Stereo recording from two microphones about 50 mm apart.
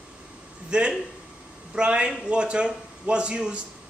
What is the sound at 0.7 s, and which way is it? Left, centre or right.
Speech, centre.